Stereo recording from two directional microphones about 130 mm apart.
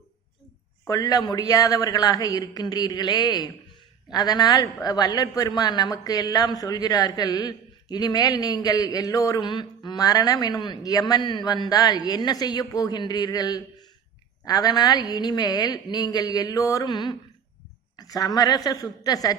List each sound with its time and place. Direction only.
0.9 s a woman's voice: 30° left (ahead or behind)